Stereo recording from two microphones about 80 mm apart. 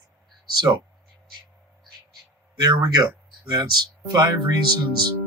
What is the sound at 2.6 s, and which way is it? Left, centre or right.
A man's voice, right.